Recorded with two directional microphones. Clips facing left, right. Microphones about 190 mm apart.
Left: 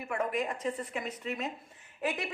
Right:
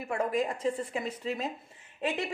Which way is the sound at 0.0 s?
30° right (ahead or behind).